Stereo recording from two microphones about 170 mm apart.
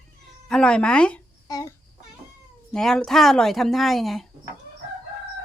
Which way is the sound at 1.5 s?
20° left (ahead or behind).